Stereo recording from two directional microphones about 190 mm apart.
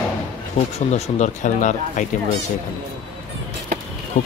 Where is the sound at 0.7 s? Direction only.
35° left (ahead or behind).